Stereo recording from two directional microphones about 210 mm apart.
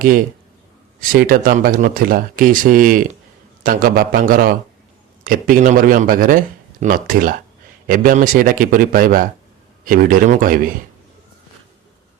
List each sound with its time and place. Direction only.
0.9 s speech: 40° right (ahead or behind)